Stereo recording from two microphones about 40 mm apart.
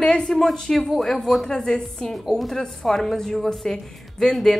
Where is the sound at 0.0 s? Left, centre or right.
Centre.